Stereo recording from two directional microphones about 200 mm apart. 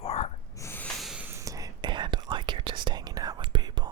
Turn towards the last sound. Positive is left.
turn(degrees=-20)  # may be behind; listen again after turning